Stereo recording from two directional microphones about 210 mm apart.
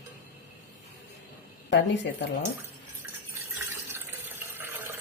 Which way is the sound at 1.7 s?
55° left (ahead or behind).